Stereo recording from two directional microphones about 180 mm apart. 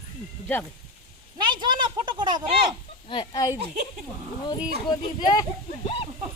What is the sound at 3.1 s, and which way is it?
Speech, 25° left (ahead or behind).